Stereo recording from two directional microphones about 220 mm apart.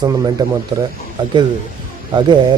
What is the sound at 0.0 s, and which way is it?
Speech, 15° right (ahead or behind).